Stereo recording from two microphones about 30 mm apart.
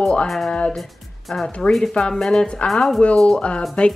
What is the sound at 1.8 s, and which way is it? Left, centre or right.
Speech, left.